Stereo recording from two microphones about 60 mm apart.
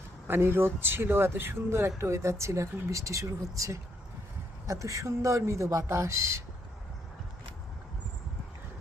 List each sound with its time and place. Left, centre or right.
0.3 s speech: right